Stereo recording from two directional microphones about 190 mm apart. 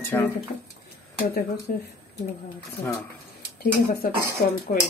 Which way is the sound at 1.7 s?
50° left (ahead or behind).